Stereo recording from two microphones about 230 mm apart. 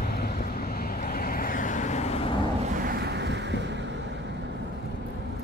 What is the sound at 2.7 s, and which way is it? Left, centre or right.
Ocean, right.